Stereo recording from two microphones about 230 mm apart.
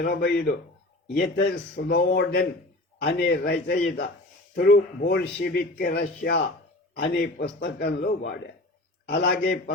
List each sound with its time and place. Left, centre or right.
0.0 s a man's voice: left
8.0 s a man's voice: left